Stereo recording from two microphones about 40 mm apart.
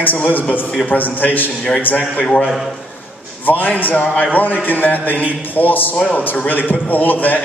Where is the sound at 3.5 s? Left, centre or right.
Left.